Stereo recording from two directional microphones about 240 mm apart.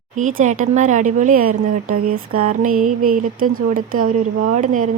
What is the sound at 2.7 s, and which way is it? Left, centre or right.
Mantra, right.